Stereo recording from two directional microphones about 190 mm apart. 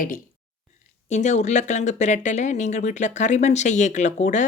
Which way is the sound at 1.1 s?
40° left (ahead or behind).